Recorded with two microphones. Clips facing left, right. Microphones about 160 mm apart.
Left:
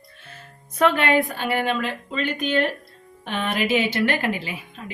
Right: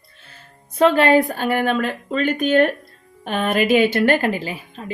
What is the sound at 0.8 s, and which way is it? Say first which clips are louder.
A woman's voice: right 5 dB; 35° right (ahead or behind).